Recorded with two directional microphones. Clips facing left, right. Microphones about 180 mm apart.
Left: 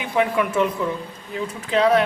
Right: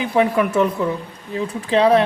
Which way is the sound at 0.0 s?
35° right (ahead or behind).